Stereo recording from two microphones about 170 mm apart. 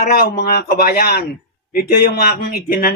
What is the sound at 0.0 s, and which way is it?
Speech, 65° left (ahead or behind).